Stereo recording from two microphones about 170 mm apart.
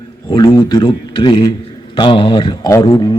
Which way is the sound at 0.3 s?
20° left (ahead or behind).